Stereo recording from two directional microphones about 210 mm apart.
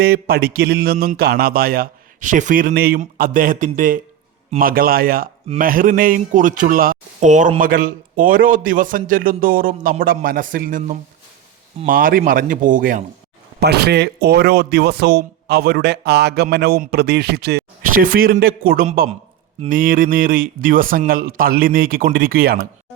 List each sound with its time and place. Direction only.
0.0 s a man's voice: 45° right (ahead or behind)
13.6 s speech: 50° right (ahead or behind)